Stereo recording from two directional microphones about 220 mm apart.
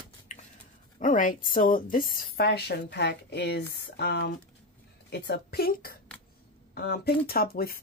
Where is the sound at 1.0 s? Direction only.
35° left (ahead or behind).